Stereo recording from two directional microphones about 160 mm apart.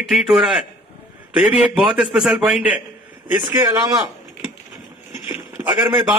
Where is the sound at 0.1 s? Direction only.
5° right (ahead or behind).